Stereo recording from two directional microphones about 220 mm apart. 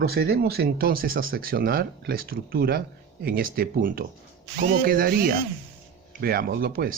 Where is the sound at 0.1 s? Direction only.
45° right (ahead or behind).